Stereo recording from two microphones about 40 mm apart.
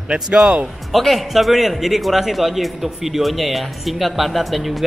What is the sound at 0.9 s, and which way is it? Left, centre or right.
Speech, centre.